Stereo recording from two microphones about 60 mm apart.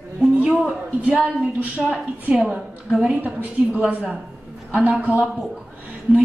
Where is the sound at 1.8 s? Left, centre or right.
Centre.